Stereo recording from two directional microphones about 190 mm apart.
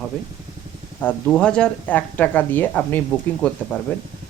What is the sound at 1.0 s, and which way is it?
Speech, 5° left (ahead or behind).